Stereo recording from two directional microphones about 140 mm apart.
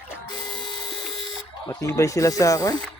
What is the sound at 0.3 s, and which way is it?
Printer, 35° left (ahead or behind).